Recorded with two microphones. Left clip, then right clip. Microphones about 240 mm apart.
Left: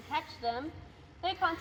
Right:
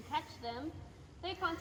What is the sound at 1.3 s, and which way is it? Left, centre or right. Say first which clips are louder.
Speech: left 6 dB; left.